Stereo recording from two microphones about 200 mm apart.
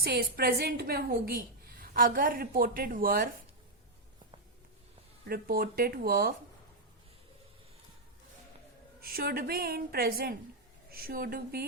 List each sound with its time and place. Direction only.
0.0 s a woman's voice: 50° right (ahead or behind)
5.2 s a woman's voice: 50° right (ahead or behind)
9.0 s a woman's voice: 50° right (ahead or behind)